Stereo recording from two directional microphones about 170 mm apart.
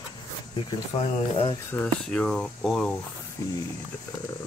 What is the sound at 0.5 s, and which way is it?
Speech, 35° left (ahead or behind).